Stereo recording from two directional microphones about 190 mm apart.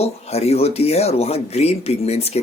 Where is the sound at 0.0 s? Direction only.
30° left (ahead or behind).